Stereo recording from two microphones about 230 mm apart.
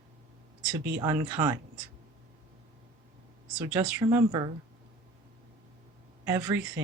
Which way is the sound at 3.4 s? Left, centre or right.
Centre.